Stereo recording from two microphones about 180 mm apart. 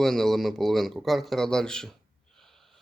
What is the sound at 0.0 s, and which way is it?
Speech, centre (ahead or behind).